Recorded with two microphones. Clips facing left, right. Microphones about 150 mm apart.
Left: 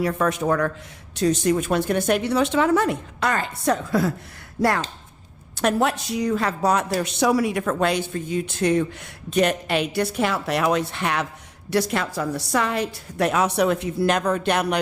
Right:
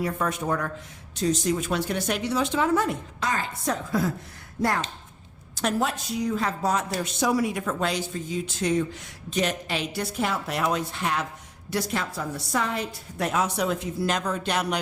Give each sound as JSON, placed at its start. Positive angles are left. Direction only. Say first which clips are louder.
{"t": 0.0, "sound": "speech", "louder": "left 5 dB", "side_deg": 80}
{"t": 1.1, "sound": "speech", "louder": "left 5 dB", "side_deg": 65}
{"t": 5.5, "sound": "a woman's voice", "louder": "left 5 dB", "side_deg": 65}